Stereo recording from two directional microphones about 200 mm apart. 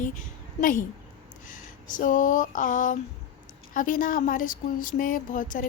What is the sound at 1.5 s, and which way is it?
Speech, 40° left (ahead or behind).